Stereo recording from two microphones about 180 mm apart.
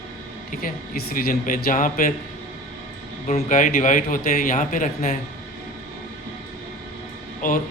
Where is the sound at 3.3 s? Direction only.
50° left (ahead or behind).